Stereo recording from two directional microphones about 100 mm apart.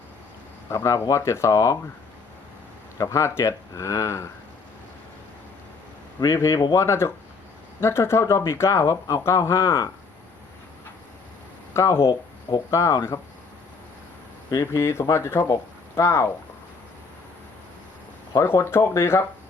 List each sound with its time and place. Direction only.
0.7 s speech: 30° left (ahead or behind)
3.0 s speech: 30° left (ahead or behind)
6.1 s speech: 35° left (ahead or behind)
11.7 s speech: 30° left (ahead or behind)
14.5 s speech: 35° left (ahead or behind)
18.3 s speech: 25° left (ahead or behind)